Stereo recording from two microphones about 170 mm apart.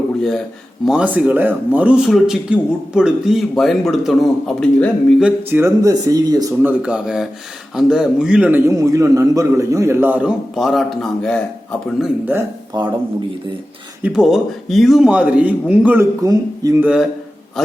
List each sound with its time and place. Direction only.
0.2 s speech: 5° left (ahead or behind)
0.9 s speech: 5° right (ahead or behind)
5.2 s speech: 15° right (ahead or behind)
6.6 s a man's voice: 10° right (ahead or behind)
11.9 s a man's voice: 5° right (ahead or behind)
12.7 s speech: 25° right (ahead or behind)
14.0 s speech: 5° right (ahead or behind)
16.2 s speech: 20° right (ahead or behind)
16.8 s speech: 5° right (ahead or behind)